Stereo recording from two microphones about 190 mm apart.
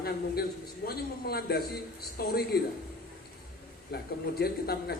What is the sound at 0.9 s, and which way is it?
Speech, 55° left (ahead or behind).